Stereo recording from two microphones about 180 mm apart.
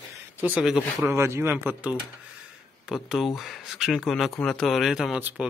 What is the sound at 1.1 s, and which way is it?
Speech, 15° right (ahead or behind).